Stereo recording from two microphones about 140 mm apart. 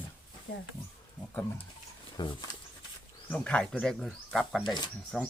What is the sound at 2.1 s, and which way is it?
Speech, 35° left (ahead or behind).